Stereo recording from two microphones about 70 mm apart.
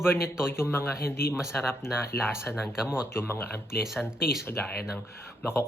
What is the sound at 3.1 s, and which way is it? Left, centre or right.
Speech, left.